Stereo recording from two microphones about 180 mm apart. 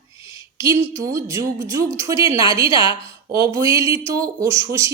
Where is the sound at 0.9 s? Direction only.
15° right (ahead or behind).